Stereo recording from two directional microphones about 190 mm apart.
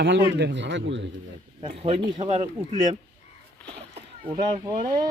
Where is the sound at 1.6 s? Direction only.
30° right (ahead or behind).